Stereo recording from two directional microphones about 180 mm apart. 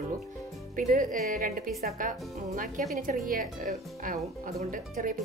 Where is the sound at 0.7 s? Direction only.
50° right (ahead or behind).